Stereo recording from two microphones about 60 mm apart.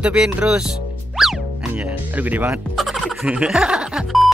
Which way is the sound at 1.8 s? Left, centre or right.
Right.